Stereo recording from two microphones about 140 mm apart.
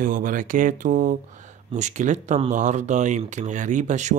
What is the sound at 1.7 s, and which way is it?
Speech, 60° right (ahead or behind).